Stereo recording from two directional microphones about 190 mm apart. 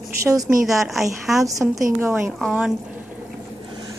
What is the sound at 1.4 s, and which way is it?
Speech, 15° right (ahead or behind).